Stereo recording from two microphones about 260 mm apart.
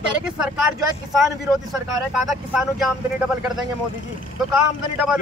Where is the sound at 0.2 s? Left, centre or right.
Centre.